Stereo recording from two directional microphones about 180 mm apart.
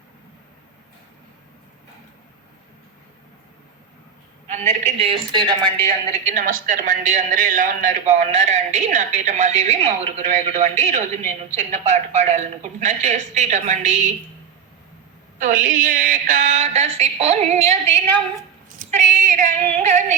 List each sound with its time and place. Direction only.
4.4 s a man's voice: 40° right (ahead or behind)
4.9 s a woman's voice: 30° right (ahead or behind)
6.1 s speech: 40° right (ahead or behind)
15.4 s speech: 50° right (ahead or behind)